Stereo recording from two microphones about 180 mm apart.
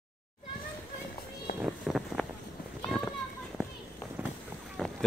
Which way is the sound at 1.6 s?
5° right (ahead or behind).